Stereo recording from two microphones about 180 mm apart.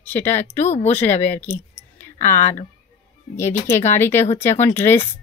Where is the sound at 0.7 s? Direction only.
40° left (ahead or behind).